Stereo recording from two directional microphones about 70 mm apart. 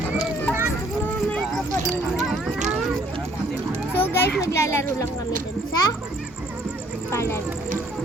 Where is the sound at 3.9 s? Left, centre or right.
Left.